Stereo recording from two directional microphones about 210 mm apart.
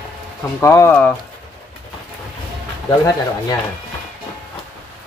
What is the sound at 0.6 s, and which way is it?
Speech, 15° left (ahead or behind).